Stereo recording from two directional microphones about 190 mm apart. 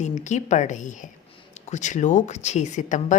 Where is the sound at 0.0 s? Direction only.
40° left (ahead or behind).